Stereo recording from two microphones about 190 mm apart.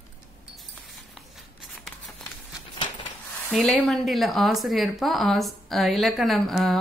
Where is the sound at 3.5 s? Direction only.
Centre (ahead or behind).